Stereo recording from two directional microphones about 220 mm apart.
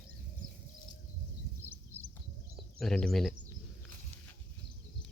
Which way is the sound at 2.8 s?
Centre (ahead or behind).